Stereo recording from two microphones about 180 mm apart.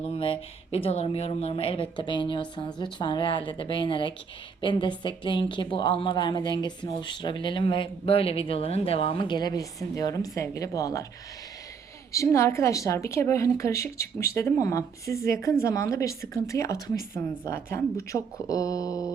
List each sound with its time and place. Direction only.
0.0 s speech: 30° left (ahead or behind)
12.1 s a woman's voice: 15° left (ahead or behind)